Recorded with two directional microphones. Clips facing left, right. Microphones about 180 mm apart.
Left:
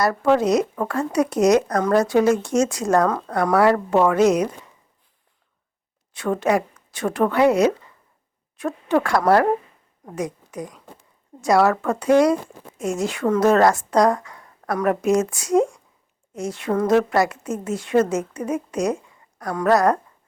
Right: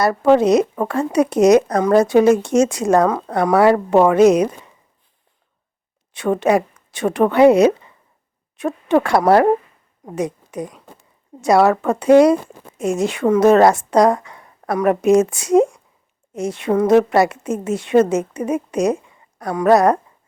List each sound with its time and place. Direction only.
0.0 s a woman's voice: 25° right (ahead or behind)
6.1 s a woman's voice: 20° right (ahead or behind)